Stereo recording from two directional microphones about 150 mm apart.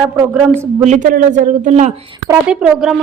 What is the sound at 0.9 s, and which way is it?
Speech, 55° right (ahead or behind).